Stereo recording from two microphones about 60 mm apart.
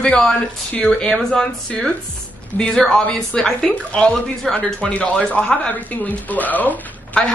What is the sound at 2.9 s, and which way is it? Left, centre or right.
Speech, centre.